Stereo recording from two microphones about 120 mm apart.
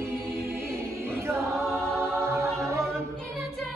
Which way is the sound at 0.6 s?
20° right (ahead or behind).